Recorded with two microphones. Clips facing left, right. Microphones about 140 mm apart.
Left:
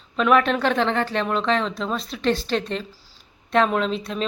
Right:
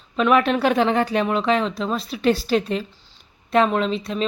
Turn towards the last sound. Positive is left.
turn(degrees=0)  # may be behind; listen again after turning